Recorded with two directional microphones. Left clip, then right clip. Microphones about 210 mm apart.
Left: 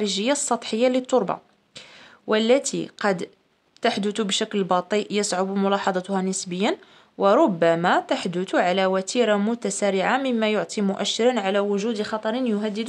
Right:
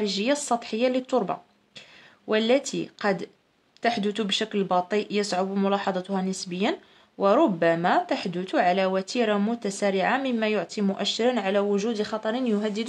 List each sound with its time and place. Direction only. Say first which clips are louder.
0.0 s speech: left 2 dB; 25° left (ahead or behind); by 12.8 s 10° left (ahead or behind)